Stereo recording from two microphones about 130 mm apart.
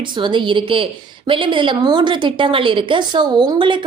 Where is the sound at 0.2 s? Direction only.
40° right (ahead or behind).